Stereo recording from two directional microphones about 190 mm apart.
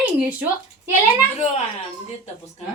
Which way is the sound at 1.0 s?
35° left (ahead or behind).